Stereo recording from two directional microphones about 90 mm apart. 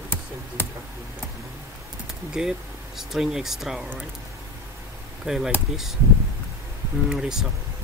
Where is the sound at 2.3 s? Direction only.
5° right (ahead or behind).